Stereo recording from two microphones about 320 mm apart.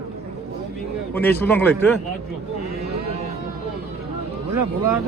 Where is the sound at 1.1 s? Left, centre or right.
Centre.